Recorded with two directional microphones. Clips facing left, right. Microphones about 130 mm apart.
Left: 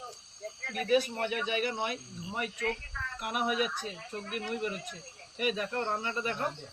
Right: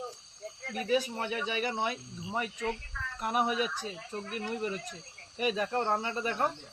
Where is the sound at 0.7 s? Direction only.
30° right (ahead or behind).